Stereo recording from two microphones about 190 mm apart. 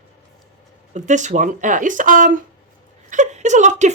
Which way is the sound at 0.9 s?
40° right (ahead or behind).